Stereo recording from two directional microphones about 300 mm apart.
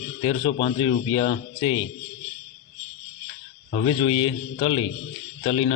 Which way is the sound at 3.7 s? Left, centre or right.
Centre.